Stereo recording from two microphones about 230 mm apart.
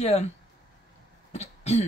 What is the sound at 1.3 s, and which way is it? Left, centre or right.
Throat clearing, left.